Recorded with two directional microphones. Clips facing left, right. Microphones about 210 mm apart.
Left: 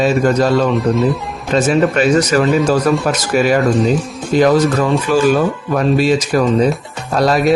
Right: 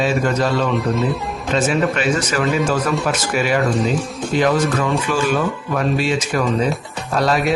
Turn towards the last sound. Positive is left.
turn(degrees=40)  # may be behind; listen again after turning